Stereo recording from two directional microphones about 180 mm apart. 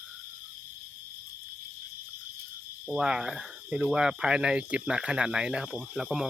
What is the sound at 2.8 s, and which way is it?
Speech, 5° right (ahead or behind).